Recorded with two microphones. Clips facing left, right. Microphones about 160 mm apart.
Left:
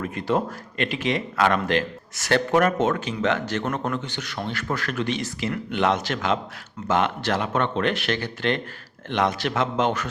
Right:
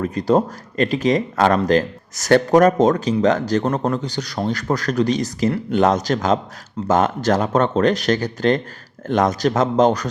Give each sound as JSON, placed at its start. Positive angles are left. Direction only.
{"t": 0.0, "sound": "speech", "side_deg": -35}